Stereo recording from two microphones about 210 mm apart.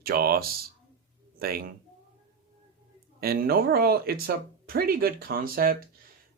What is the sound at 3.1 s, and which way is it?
Speech, 45° right (ahead or behind).